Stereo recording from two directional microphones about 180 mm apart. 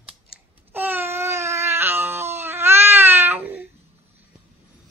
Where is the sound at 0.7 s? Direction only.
10° right (ahead or behind).